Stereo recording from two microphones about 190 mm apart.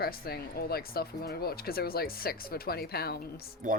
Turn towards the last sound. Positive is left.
turn(degrees=-45)  # may be behind; listen again after turning